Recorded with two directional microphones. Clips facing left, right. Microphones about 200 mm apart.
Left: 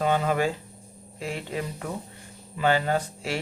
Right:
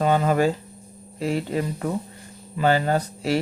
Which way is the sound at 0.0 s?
40° right (ahead or behind).